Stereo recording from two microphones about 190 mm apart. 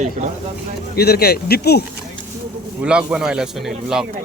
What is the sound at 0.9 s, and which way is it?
Speech, 55° left (ahead or behind).